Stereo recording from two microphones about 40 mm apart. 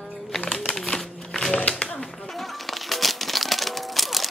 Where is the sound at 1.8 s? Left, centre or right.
Centre.